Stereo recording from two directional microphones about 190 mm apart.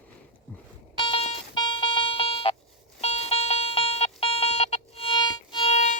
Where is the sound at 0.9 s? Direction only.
25° left (ahead or behind).